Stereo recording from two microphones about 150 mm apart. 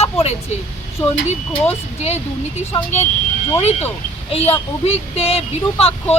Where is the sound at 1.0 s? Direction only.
40° left (ahead or behind).